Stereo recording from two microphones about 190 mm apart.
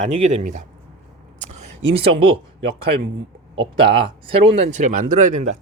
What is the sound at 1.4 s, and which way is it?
Speech, 35° right (ahead or behind).